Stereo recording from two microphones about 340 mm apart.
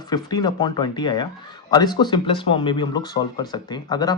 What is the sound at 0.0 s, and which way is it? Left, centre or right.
Speech, centre.